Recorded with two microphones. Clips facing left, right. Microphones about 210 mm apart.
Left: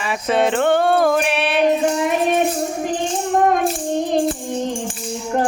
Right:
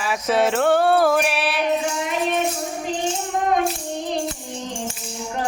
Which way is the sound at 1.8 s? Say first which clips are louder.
Left 6 dB; 50° left (ahead or behind).